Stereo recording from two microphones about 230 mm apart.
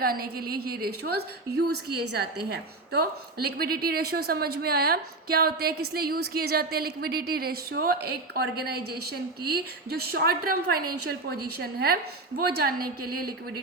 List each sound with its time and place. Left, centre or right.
0.0 s a woman's voice: right